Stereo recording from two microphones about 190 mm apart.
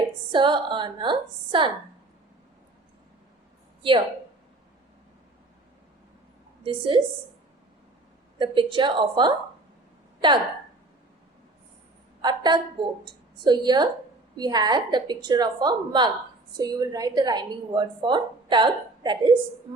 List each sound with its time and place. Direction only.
0.3 s a woman's voice: 25° right (ahead or behind)
6.7 s a woman's voice: 25° right (ahead or behind)
8.4 s a woman's voice: 25° right (ahead or behind)
12.2 s a woman's voice: 25° right (ahead or behind)